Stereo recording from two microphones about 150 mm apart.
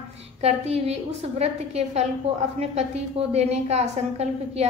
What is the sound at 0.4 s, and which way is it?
A woman's voice, 45° right (ahead or behind).